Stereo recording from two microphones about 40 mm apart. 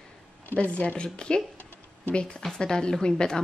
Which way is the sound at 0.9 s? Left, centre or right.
Left.